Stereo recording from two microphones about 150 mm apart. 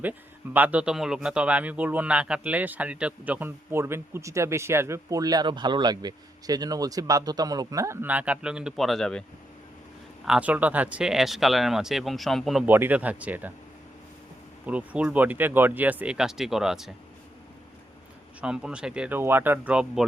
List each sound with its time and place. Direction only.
0.0 s a man's voice: 10° right (ahead or behind)
8.0 s speech: 10° right (ahead or behind)
10.2 s speech: 5° right (ahead or behind)
12.6 s a man's voice: 15° right (ahead or behind)
14.7 s a man's voice: 10° right (ahead or behind)
18.3 s a man's voice: 5° right (ahead or behind)